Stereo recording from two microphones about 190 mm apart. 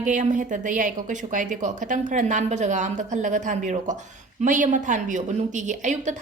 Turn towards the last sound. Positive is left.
turn(degrees=-40)  # may be behind; listen again after turning